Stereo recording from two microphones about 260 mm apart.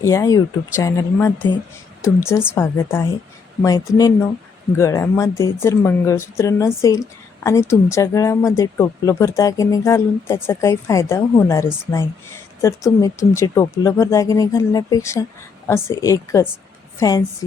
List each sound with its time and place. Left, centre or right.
0.0 s a woman's voice: centre